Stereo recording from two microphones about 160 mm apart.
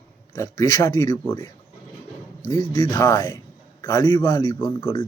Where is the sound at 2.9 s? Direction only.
20° left (ahead or behind).